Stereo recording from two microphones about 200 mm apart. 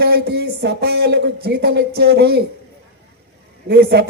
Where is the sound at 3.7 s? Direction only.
55° right (ahead or behind).